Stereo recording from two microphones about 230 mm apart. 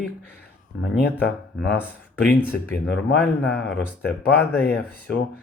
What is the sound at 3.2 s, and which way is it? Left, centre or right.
Speech, centre.